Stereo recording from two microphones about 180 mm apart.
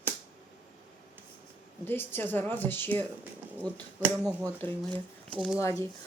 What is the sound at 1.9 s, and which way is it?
Speech, 10° left (ahead or behind).